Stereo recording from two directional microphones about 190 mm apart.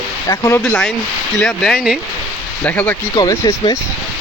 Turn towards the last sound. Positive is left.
turn(degrees=20)  # may be behind; listen again after turning